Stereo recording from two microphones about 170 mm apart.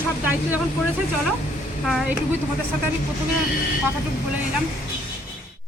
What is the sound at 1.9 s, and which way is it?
Speech, centre (ahead or behind).